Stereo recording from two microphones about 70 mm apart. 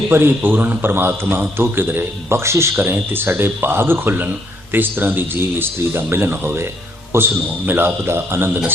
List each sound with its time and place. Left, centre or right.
0.1 s a man's voice: right